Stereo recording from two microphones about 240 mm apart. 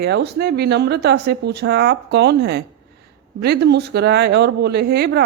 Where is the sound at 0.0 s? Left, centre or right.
Right.